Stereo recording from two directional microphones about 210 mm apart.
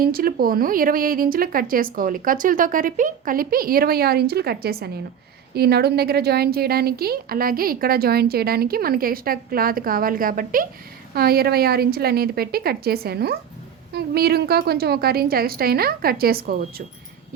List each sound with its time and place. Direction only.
0.0 s a woman's voice: 45° right (ahead or behind)